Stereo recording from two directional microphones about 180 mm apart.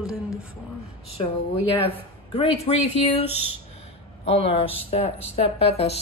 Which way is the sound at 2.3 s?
35° left (ahead or behind).